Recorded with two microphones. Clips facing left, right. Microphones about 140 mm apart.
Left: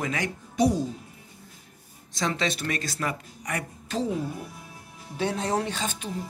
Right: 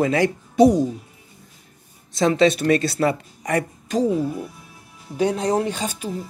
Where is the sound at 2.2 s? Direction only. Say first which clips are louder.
Right 11 dB; 60° right (ahead or behind).